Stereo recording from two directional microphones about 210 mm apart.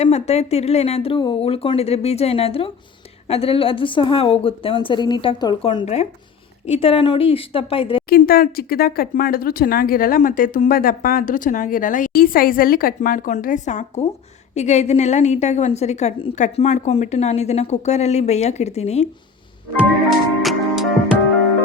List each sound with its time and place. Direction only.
0.0 s a woman's voice: 30° left (ahead or behind)
8.1 s a woman's voice: 45° left (ahead or behind)
19.8 s music: centre (ahead or behind)